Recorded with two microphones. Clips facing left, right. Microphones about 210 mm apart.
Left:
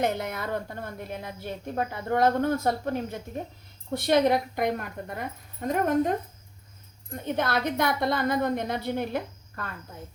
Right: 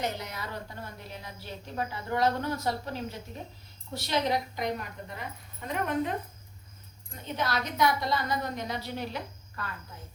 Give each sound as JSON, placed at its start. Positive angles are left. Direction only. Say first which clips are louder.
{"t": 0.0, "sound": "a woman's voice", "louder": "left 7 dB", "side_deg": 55}
{"t": 7.2, "sound": "a woman's voice", "louder": "left 5 dB", "side_deg": 55}